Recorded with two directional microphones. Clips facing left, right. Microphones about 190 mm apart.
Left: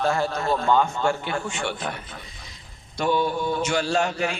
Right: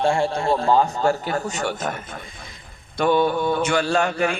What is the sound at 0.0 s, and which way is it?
A man's voice, 30° right (ahead or behind).